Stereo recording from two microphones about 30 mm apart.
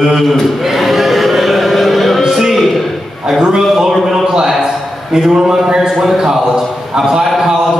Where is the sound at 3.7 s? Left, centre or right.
Centre.